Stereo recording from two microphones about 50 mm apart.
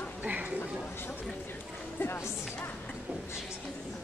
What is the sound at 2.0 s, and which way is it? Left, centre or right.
Music, left.